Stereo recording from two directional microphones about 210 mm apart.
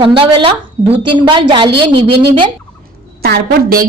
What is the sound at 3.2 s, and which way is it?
Speech, 45° right (ahead or behind).